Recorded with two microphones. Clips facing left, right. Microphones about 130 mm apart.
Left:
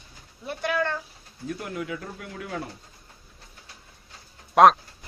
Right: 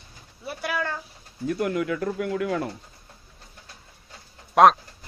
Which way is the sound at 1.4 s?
65° right (ahead or behind).